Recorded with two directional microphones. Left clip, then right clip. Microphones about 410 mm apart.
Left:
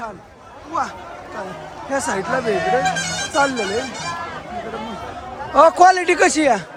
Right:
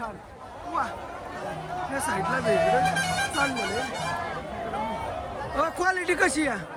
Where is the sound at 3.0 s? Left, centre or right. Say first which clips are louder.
Left 2 dB; centre.